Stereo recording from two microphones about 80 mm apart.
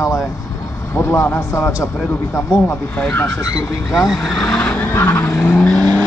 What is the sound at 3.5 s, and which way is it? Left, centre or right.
Speech, centre.